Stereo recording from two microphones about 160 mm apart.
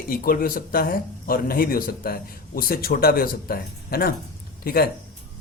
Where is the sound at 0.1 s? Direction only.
65° left (ahead or behind).